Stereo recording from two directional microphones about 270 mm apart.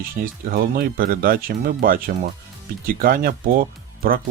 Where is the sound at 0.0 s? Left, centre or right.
Right.